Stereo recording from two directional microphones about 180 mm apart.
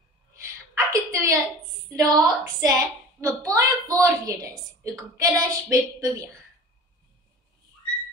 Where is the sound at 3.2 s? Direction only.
15° right (ahead or behind).